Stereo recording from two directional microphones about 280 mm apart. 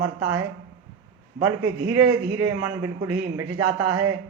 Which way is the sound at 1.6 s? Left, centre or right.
Right.